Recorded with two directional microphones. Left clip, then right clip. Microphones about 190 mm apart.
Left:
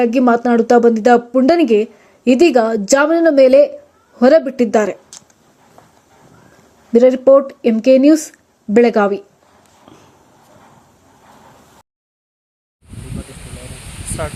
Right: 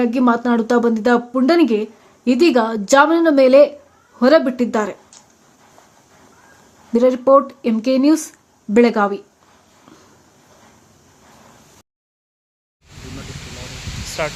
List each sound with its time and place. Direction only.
0.0 s speech: 15° left (ahead or behind)
6.9 s speech: 15° left (ahead or behind)
14.2 s speech: 10° left (ahead or behind)